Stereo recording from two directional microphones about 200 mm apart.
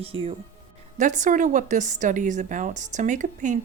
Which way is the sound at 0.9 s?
40° right (ahead or behind).